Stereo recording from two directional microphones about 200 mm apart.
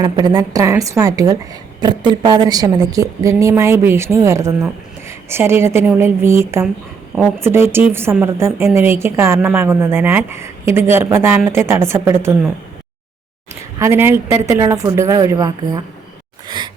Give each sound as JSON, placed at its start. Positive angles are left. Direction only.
{"t": 0.0, "sound": "a woman's voice", "side_deg": -20}
{"t": 13.7, "sound": "a woman's voice", "side_deg": -15}